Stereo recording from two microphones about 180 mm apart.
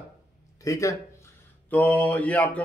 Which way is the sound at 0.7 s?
15° left (ahead or behind).